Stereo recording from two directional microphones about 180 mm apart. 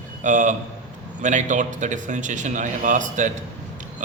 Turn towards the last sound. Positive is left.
turn(degrees=-45)  # may be behind; listen again after turning